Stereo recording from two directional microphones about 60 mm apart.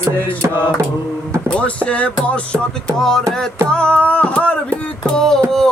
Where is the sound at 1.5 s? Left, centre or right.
Centre.